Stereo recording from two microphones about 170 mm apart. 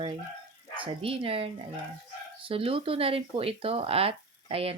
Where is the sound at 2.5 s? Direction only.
35° right (ahead or behind).